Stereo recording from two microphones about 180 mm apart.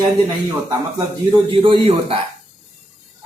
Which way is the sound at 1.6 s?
30° right (ahead or behind).